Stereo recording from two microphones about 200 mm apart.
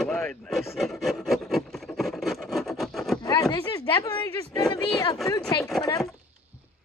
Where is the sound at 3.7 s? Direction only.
15° left (ahead or behind).